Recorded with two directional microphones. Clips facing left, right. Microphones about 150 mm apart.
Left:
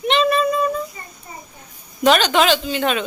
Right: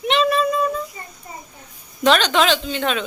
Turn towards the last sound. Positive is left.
turn(degrees=5)  # may be behind; listen again after turning